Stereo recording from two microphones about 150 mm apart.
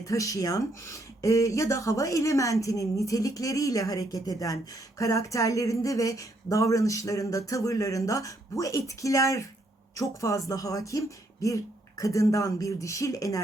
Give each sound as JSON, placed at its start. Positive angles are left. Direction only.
{"t": 0.0, "sound": "speech", "side_deg": 20}